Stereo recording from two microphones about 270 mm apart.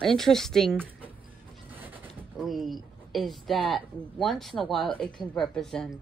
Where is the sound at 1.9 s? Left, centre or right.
Centre.